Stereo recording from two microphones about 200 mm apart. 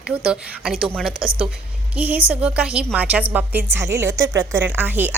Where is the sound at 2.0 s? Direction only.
10° right (ahead or behind).